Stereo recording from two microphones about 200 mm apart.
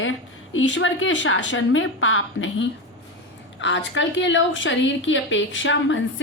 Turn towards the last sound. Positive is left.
turn(degrees=70)  # may be behind; listen again after turning